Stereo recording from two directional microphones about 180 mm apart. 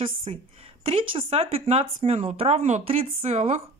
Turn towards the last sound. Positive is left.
turn(degrees=-35)  # may be behind; listen again after turning